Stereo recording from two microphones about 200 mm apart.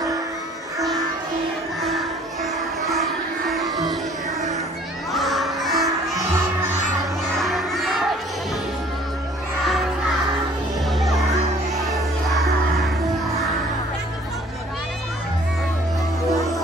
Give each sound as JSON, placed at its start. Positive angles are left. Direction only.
{"t": 1.8, "sound": "music", "side_deg": 0}
{"t": 3.6, "sound": "music", "side_deg": -20}
{"t": 5.1, "sound": "children shouting", "side_deg": 0}
{"t": 7.4, "sound": "crowd", "side_deg": 0}